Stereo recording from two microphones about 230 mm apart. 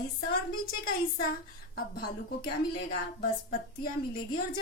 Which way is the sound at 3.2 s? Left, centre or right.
Left.